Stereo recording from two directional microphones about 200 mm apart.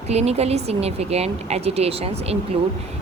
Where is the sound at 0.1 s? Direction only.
30° right (ahead or behind).